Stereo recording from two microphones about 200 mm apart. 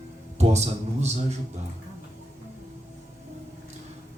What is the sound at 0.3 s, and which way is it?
Speech, 35° right (ahead or behind).